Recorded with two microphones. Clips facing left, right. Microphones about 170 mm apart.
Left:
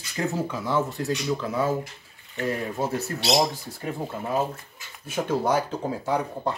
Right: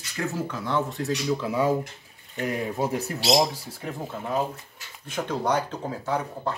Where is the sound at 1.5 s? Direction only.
15° right (ahead or behind).